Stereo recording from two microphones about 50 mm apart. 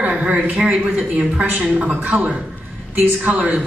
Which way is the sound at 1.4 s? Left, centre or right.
Right.